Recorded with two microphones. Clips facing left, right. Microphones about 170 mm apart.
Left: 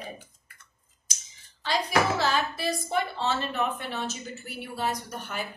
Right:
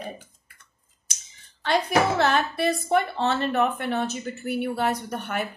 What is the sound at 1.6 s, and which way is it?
A woman's voice, 60° right (ahead or behind).